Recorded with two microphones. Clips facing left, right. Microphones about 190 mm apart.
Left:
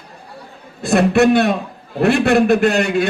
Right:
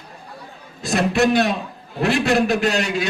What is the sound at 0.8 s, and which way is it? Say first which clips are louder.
A man's voice: left 5 dB; 60° left (ahead or behind).